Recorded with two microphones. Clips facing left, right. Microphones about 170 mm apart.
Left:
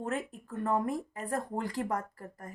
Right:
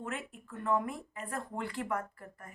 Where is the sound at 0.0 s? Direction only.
40° left (ahead or behind).